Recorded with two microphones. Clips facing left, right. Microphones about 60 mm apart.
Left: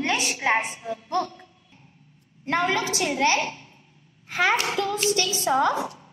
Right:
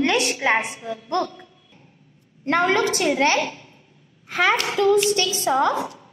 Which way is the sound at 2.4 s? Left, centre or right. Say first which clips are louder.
Right 5 dB; right.